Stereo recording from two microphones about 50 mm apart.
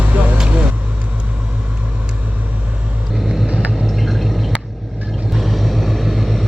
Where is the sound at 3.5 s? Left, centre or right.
Centre.